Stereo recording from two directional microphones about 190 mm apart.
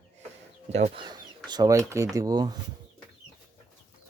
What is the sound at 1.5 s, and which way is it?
Speech, 20° right (ahead or behind).